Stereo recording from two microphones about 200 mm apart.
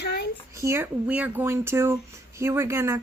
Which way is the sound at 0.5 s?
15° right (ahead or behind).